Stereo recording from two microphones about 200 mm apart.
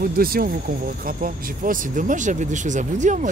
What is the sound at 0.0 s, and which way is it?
Speech, 45° right (ahead or behind).